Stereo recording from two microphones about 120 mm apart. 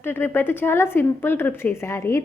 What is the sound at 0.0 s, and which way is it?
A woman's voice, 20° left (ahead or behind).